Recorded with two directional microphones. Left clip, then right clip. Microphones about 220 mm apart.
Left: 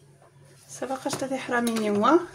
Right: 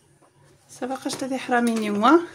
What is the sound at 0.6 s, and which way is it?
Speech, 25° right (ahead or behind).